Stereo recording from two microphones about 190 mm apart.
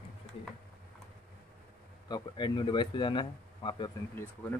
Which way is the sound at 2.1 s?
25° left (ahead or behind).